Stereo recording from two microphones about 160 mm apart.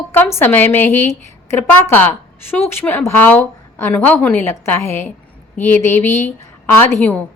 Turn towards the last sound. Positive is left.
turn(degrees=10)  # may be behind; listen again after turning